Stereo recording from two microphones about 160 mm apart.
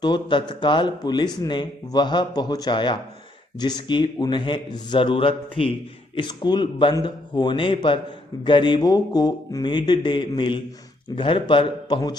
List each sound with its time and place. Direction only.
0.0 s a man's voice: 30° left (ahead or behind)